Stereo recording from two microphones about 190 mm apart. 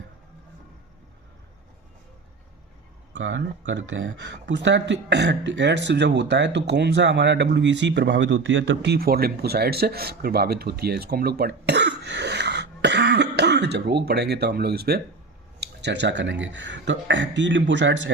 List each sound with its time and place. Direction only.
3.1 s speech: 75° right (ahead or behind)